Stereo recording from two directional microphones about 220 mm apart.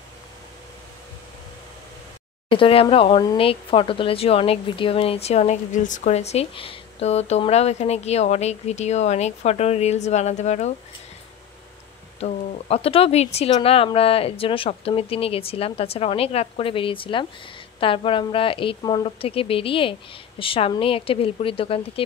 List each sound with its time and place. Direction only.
2.5 s speech: 25° left (ahead or behind)
12.2 s speech: 25° left (ahead or behind)